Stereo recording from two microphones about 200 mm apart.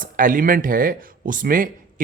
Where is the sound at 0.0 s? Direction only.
40° right (ahead or behind).